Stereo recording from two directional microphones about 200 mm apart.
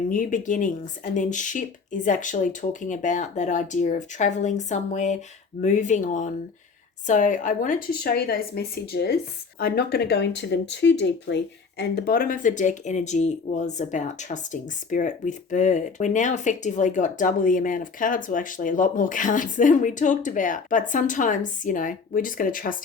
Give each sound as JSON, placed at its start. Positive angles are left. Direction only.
{"t": 0.1, "sound": "speech", "side_deg": 40}
{"t": 11.8, "sound": "speech", "side_deg": 50}